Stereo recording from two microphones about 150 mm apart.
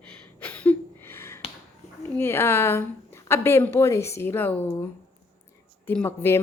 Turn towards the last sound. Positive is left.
turn(degrees=15)  # may be behind; listen again after turning